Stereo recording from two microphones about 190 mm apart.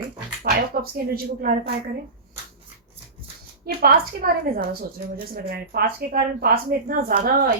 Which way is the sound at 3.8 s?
50° right (ahead or behind).